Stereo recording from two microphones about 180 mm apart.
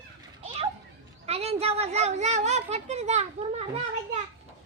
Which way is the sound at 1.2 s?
35° right (ahead or behind).